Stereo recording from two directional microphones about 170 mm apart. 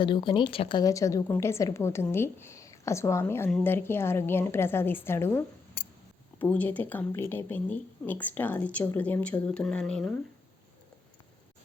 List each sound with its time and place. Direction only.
0.0 s a woman's voice: 30° left (ahead or behind)
6.4 s speech: 10° left (ahead or behind)